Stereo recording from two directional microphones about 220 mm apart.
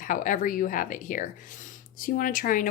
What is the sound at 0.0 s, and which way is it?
Speech, 35° left (ahead or behind).